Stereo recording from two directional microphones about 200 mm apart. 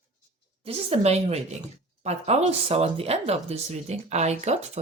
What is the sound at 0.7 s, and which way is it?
Speech, 30° right (ahead or behind).